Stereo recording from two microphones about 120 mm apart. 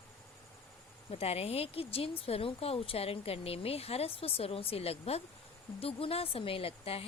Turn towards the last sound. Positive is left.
turn(degrees=55)  # may be behind; listen again after turning